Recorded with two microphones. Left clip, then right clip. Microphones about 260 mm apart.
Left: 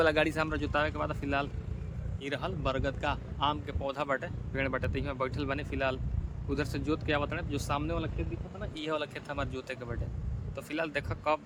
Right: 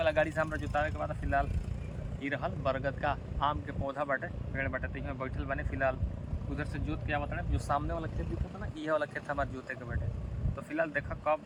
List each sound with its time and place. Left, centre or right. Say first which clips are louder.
0.0 s speech: left 2 dB; centre
7.7 s speech: right 2 dB; centre
10.7 s speech: right 1 dB; centre